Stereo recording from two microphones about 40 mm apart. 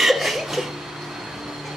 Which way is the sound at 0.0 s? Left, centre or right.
Centre.